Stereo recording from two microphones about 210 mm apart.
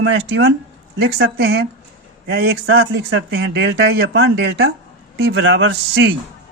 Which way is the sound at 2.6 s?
75° right (ahead or behind).